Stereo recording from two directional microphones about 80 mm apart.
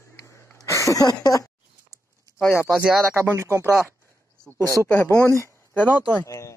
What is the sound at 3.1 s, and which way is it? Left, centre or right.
Speech, right.